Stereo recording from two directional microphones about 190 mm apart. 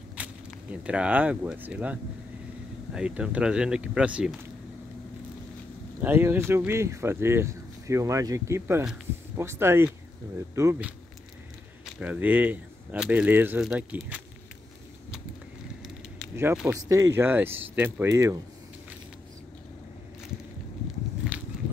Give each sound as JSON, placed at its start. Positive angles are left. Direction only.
{"t": 0.1, "sound": "speech", "side_deg": -5}
{"t": 6.0, "sound": "speech", "side_deg": -10}
{"t": 16.6, "sound": "speech", "side_deg": -15}